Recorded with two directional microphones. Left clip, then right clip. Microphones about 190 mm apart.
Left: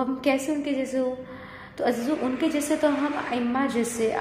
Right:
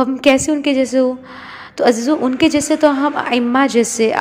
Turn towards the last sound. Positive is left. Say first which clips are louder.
# right 11 dB
turn(degrees=-35)  # may be behind; listen again after turning